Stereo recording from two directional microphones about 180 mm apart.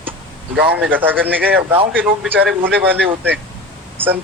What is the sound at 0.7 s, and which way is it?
Speech, 10° right (ahead or behind).